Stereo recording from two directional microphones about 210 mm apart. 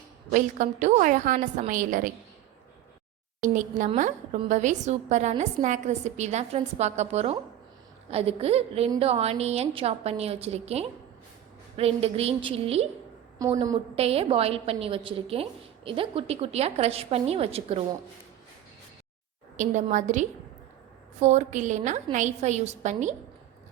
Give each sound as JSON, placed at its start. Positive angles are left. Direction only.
{"t": 0.3, "sound": "a woman's voice", "side_deg": -40}
{"t": 3.4, "sound": "a woman's voice", "side_deg": -35}
{"t": 13.9, "sound": "a woman's voice", "side_deg": -30}
{"t": 19.5, "sound": "a woman's voice", "side_deg": -35}